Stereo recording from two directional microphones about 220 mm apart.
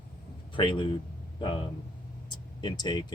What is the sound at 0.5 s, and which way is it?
Speech, 20° left (ahead or behind).